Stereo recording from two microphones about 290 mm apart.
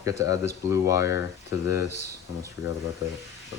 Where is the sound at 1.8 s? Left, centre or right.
Left.